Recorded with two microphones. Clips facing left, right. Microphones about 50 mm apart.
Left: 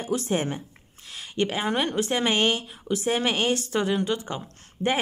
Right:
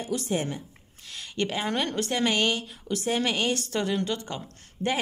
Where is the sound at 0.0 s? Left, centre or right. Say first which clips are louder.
Left 3 dB; left.